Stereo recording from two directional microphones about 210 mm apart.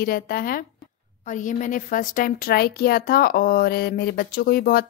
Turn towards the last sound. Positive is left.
turn(degrees=45)  # may be behind; listen again after turning